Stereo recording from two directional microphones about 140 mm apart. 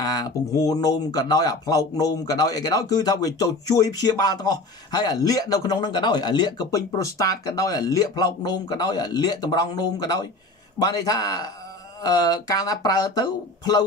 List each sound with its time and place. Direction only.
0.0 s speech: 25° left (ahead or behind)